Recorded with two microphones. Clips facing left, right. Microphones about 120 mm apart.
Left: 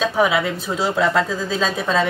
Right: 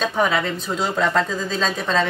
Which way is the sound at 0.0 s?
5° left (ahead or behind).